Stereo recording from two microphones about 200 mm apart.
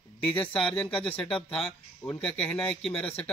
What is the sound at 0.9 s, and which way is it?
Speech, 25° left (ahead or behind).